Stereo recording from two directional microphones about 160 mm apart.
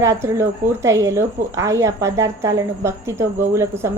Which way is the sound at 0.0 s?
20° right (ahead or behind).